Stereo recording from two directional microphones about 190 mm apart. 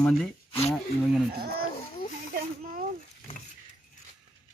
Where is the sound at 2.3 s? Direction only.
50° right (ahead or behind).